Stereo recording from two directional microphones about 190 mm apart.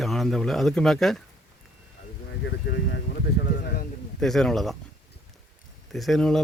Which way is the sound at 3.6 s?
50° left (ahead or behind).